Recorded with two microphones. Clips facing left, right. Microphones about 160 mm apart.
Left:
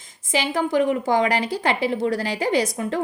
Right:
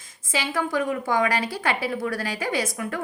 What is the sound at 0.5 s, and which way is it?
A woman's voice, 20° left (ahead or behind).